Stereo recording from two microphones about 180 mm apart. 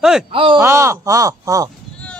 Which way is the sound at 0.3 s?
30° right (ahead or behind).